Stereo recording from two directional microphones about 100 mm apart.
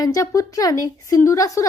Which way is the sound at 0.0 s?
35° left (ahead or behind).